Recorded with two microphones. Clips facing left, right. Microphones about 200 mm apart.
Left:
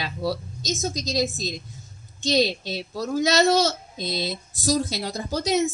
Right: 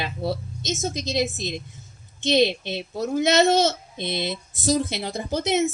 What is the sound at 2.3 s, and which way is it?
A child's voice, 25° right (ahead or behind).